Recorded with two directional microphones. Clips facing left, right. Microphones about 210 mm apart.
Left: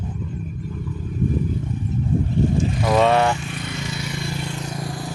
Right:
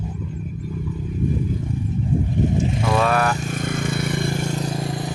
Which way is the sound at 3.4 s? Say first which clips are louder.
Right 5 dB; 45° right (ahead or behind).